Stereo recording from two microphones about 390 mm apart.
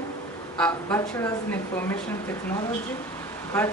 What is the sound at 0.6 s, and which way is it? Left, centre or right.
Speech, centre.